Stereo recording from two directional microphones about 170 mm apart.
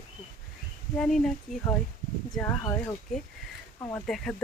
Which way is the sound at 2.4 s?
15° left (ahead or behind).